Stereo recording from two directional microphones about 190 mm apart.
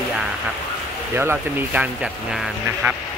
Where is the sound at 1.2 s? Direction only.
10° right (ahead or behind).